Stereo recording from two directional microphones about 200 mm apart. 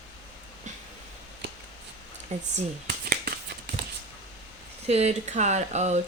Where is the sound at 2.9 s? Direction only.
45° right (ahead or behind).